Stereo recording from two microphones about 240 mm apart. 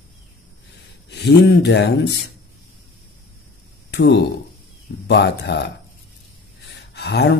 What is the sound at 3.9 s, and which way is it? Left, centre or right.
Speech, left.